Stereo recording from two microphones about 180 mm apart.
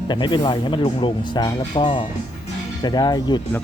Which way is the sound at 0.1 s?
25° left (ahead or behind).